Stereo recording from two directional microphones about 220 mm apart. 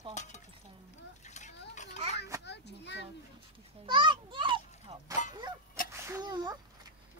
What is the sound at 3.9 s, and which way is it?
Speech, 20° right (ahead or behind).